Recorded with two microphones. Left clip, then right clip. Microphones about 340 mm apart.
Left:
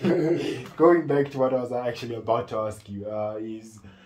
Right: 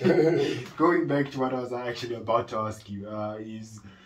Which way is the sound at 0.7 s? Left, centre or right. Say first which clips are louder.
Left 5 dB; left.